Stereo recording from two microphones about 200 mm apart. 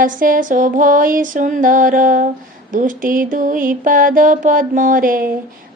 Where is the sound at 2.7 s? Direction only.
40° right (ahead or behind).